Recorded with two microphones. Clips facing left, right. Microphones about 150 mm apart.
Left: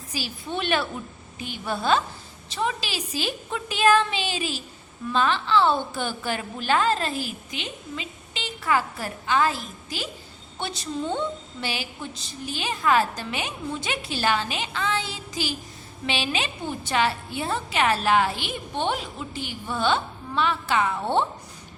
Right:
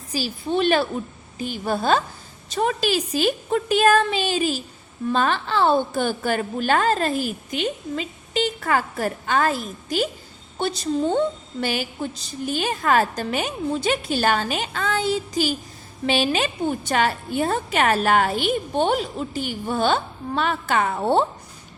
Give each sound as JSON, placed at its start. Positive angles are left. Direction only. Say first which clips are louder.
{"t": 0.1, "sound": "a woman's voice", "louder": "right 7 dB", "side_deg": -40}